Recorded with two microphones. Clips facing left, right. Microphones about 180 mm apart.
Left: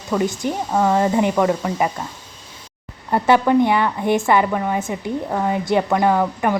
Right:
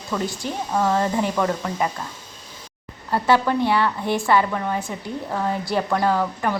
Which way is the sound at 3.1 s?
20° left (ahead or behind).